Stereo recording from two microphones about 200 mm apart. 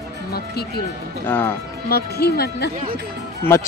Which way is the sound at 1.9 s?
50° left (ahead or behind).